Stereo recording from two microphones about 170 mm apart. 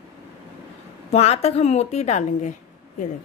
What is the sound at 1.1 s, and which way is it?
A woman's voice, 35° left (ahead or behind).